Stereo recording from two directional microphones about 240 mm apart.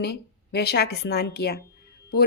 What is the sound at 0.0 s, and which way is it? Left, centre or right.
A woman's voice, left.